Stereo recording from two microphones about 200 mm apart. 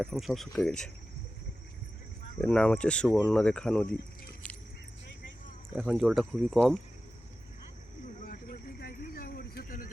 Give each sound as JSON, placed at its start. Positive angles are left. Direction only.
{"t": 0.0, "sound": "speech", "side_deg": 0}
{"t": 2.4, "sound": "speech", "side_deg": 5}
{"t": 4.4, "sound": "keys jangling", "side_deg": 5}
{"t": 5.7, "sound": "speech", "side_deg": -5}
{"t": 8.2, "sound": "a sound", "side_deg": 50}